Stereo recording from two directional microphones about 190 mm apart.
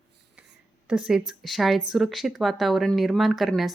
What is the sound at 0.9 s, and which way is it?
Speech, 5° right (ahead or behind).